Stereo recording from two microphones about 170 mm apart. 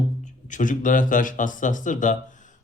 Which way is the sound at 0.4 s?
50° left (ahead or behind).